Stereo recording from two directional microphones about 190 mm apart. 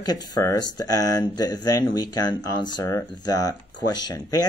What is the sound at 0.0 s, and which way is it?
Speech, 20° left (ahead or behind).